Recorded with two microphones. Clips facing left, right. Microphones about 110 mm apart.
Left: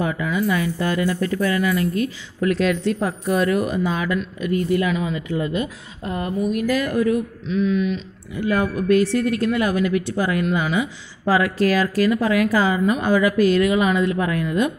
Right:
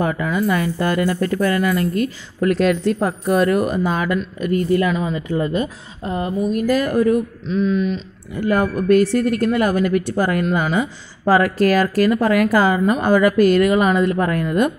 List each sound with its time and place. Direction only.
0.0 s speech: 45° right (ahead or behind)
6.1 s speech: 25° right (ahead or behind)
6.6 s speech: 40° right (ahead or behind)